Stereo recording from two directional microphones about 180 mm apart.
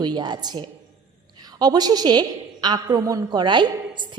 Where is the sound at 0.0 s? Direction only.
25° right (ahead or behind).